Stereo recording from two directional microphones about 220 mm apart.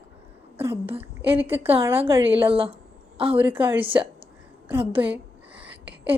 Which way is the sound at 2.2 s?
25° right (ahead or behind).